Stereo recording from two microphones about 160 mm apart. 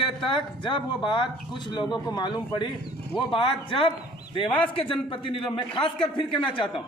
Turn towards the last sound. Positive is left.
turn(degrees=30)  # may be behind; listen again after turning